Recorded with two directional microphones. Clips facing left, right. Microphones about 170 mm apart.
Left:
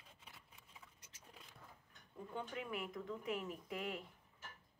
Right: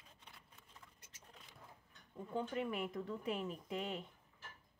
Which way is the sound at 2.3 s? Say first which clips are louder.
Right 5 dB; 35° right (ahead or behind).